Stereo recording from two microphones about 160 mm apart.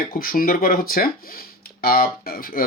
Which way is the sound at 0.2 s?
60° left (ahead or behind).